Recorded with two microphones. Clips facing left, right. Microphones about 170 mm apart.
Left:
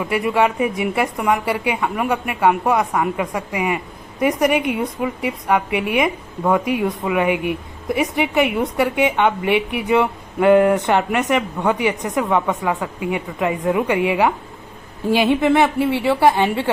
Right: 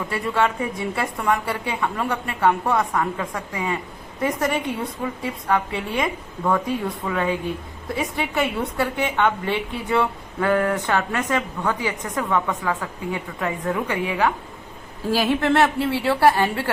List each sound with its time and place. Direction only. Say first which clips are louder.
0.0 s a woman's voice: left 4 dB; 15° left (ahead or behind)